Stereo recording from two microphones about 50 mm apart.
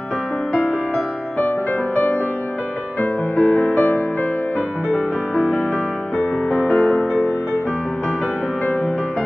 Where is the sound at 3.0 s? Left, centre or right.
Left.